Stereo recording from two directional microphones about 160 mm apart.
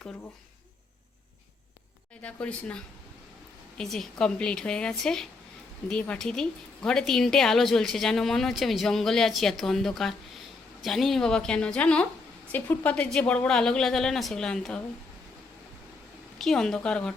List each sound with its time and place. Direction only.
2.2 s speech: 5° left (ahead or behind)
16.4 s speech: 5° left (ahead or behind)